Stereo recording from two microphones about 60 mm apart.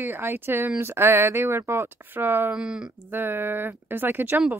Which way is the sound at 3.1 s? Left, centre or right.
Right.